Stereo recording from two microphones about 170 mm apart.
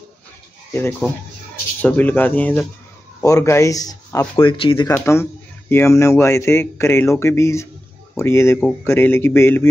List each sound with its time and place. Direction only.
1.8 s speech: 10° left (ahead or behind); by 4.9 s 30° left (ahead or behind)
4.9 s speech: 15° left (ahead or behind)